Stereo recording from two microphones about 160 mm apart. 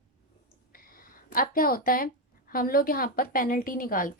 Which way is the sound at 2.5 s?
65° left (ahead or behind).